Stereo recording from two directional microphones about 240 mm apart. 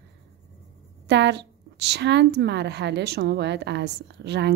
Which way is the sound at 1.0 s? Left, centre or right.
Right.